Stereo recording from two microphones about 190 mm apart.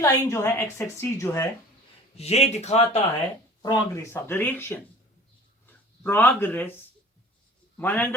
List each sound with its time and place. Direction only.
0.0 s speech: 15° left (ahead or behind)
2.1 s speech: 35° left (ahead or behind)
3.6 s speech: 20° left (ahead or behind)
6.0 s speech: 10° left (ahead or behind)
7.8 s speech: 10° left (ahead or behind)